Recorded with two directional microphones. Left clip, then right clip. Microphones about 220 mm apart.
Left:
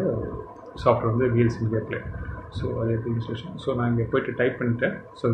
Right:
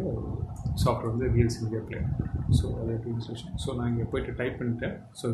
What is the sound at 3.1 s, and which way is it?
Speech, 15° right (ahead or behind).